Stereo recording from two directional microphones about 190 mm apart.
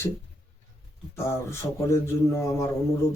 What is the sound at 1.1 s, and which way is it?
A man's voice, 15° left (ahead or behind).